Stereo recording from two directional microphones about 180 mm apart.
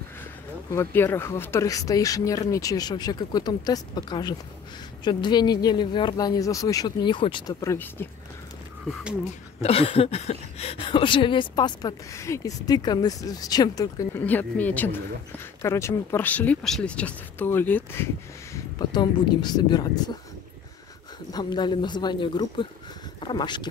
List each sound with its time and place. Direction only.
0.7 s speech: 15° left (ahead or behind)
7.6 s speech: 15° left (ahead or behind)
9.6 s speech: 30° left (ahead or behind); by 17.8 s 10° left (ahead or behind)
18.5 s speech: 25° left (ahead or behind)
21.3 s speech: 20° left (ahead or behind)